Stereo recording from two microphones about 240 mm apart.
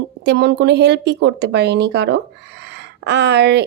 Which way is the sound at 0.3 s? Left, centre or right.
Right.